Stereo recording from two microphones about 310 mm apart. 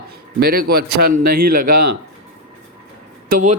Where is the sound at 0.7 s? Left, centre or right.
Right.